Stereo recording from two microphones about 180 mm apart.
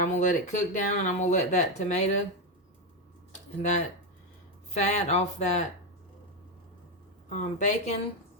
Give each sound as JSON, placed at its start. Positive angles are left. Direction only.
{"t": 0.0, "sound": "speech", "side_deg": 45}
{"t": 3.6, "sound": "speech", "side_deg": 40}
{"t": 7.3, "sound": "speech", "side_deg": 40}